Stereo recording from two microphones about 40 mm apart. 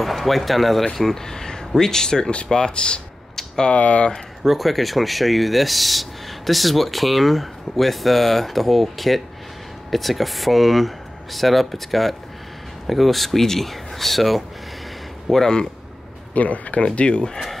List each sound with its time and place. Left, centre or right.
0.0 s speech: centre; by 3.0 s left
3.3 s a sound: centre
3.7 s speech: left
4.4 s speech: centre
15.3 s speech: centre
16.3 s speech: left